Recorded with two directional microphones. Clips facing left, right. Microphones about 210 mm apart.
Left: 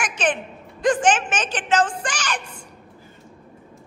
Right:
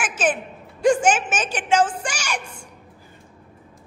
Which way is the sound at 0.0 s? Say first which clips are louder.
Right 1 dB; 5° right (ahead or behind).